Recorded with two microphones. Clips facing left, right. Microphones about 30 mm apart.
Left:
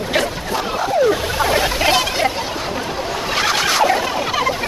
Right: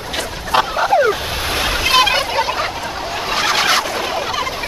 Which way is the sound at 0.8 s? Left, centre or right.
Right.